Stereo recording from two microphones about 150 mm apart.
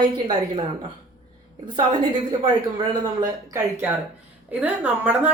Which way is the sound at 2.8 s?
25° right (ahead or behind).